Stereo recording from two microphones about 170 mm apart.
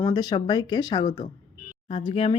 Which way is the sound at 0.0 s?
20° left (ahead or behind).